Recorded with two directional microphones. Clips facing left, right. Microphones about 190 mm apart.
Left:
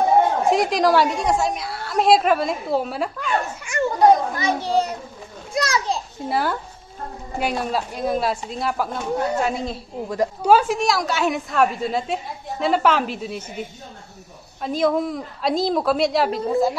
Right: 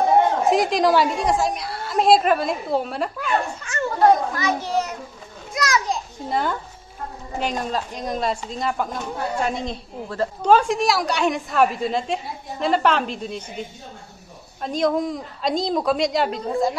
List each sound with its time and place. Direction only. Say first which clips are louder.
0.5 s a woman's voice: even; centre (ahead or behind)
3.6 s a sound: left 3 dB; 15° left (ahead or behind)
4.4 s a child's voice: left 2 dB; 30° left (ahead or behind)
5.5 s children playing: even; 30° left (ahead or behind)
6.2 s a woman's voice: left 1 dB; 5° left (ahead or behind)
10.0 s a woman's voice: left 1 dB; 15° left (ahead or behind)